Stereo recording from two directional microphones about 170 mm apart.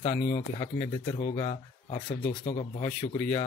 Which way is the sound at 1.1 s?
35° left (ahead or behind).